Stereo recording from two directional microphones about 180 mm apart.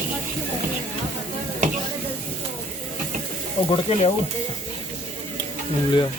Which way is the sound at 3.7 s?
35° left (ahead or behind).